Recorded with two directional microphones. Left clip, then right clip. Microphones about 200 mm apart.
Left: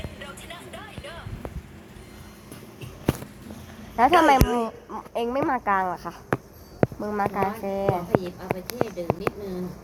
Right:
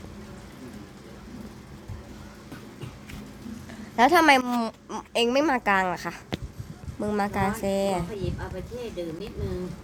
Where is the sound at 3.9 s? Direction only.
15° right (ahead or behind).